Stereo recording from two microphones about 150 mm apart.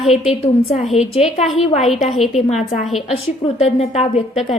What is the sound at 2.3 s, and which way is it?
A woman's voice, 50° left (ahead or behind).